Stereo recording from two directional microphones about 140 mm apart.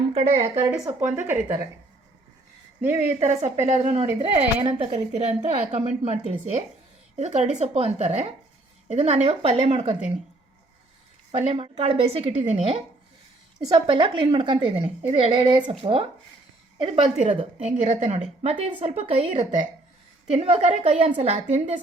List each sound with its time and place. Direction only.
0.1 s speech: 45° right (ahead or behind)
0.9 s a woman's voice: 15° right (ahead or behind)
1.3 s speech: 25° right (ahead or behind)
2.8 s a woman's voice: 15° right (ahead or behind)
3.2 s a woman's voice: 50° right (ahead or behind)
11.3 s a woman's voice: 45° right (ahead or behind)
17.2 s a woman's voice: 55° right (ahead or behind)